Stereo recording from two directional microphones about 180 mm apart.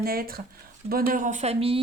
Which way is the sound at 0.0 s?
55° right (ahead or behind).